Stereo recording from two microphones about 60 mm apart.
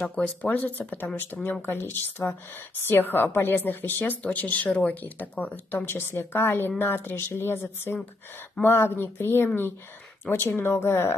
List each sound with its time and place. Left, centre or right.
0.0 s speech: centre
5.9 s speech: left